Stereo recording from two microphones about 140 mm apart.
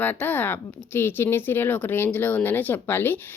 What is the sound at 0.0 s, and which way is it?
Speech, 15° left (ahead or behind).